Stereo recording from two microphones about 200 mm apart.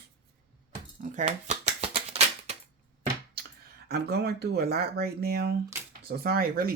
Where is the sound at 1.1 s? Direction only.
35° right (ahead or behind).